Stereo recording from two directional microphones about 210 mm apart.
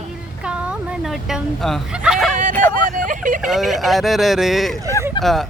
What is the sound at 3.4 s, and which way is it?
Speech, centre (ahead or behind).